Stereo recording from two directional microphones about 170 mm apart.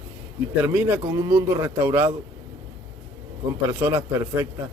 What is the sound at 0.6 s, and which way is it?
Speech, 10° right (ahead or behind).